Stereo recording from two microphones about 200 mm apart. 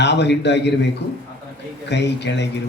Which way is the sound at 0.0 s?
60° left (ahead or behind).